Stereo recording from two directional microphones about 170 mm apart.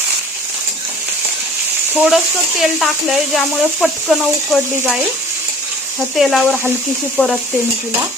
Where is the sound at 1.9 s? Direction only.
Centre (ahead or behind).